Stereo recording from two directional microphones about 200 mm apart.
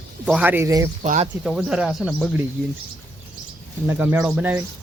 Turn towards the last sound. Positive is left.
turn(degrees=-5)  # may be behind; listen again after turning